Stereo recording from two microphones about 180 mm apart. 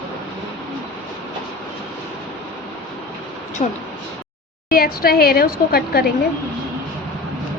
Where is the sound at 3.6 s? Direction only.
40° left (ahead or behind).